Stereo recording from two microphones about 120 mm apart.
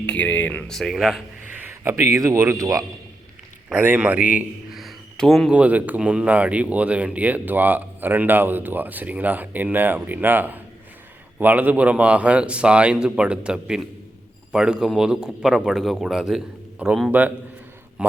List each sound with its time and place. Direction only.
0.0 s speech: 10° left (ahead or behind)
0.7 s a man's voice: centre (ahead or behind)
1.8 s speech: 20° right (ahead or behind)
3.7 s speech: 15° right (ahead or behind)
4.7 s a sound: centre (ahead or behind)
5.5 s a man's voice: 10° right (ahead or behind)